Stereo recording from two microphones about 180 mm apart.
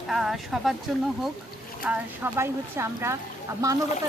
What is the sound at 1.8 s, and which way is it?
A woman's voice, 10° right (ahead or behind).